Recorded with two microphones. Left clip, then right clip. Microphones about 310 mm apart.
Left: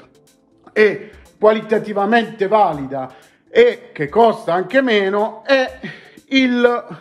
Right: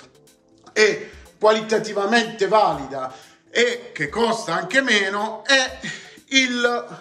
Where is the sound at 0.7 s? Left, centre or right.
Left.